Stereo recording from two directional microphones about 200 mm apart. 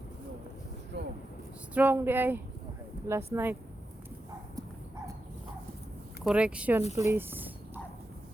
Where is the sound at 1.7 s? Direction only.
10° right (ahead or behind).